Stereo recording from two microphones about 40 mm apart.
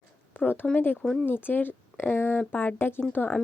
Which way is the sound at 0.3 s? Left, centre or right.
Left.